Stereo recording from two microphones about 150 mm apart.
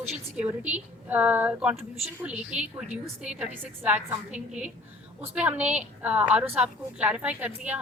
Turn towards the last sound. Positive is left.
turn(degrees=-10)  # may be behind; listen again after turning